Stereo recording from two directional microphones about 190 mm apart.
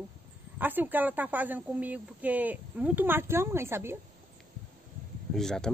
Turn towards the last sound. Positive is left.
turn(degrees=0)  # may be behind; listen again after turning